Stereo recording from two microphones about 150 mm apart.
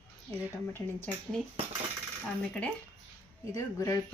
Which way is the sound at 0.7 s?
10° left (ahead or behind).